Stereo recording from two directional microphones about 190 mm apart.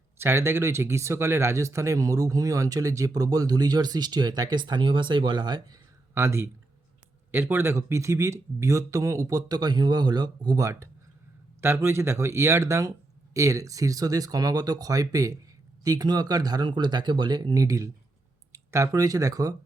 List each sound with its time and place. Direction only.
0.2 s speech: 15° right (ahead or behind)